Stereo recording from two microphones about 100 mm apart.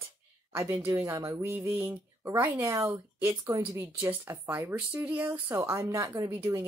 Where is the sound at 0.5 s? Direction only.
25° right (ahead or behind).